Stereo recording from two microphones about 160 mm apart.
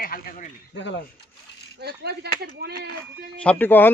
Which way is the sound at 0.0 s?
65° left (ahead or behind).